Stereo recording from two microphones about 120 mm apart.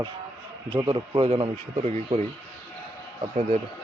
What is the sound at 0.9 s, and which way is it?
Speech, 45° right (ahead or behind).